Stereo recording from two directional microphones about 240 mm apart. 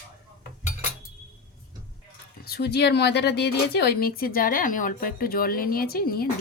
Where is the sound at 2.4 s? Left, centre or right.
Left.